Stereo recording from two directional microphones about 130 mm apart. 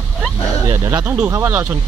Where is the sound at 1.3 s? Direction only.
25° right (ahead or behind).